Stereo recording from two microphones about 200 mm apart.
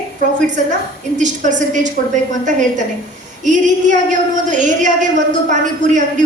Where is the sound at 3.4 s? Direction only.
40° right (ahead or behind).